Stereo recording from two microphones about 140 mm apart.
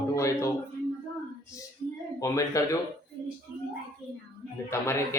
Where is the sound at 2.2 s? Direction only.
25° left (ahead or behind).